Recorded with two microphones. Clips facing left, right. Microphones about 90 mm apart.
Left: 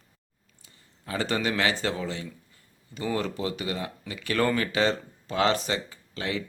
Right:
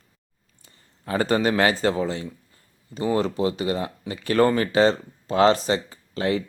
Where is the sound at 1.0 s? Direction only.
40° right (ahead or behind).